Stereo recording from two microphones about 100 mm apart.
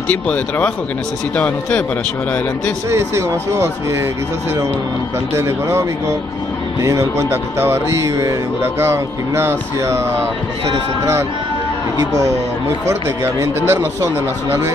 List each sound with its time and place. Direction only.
0.1 s speech: 15° left (ahead or behind)
2.9 s speech: 30° right (ahead or behind)
5.3 s speech: 30° right (ahead or behind)
12.8 s speech: 25° right (ahead or behind)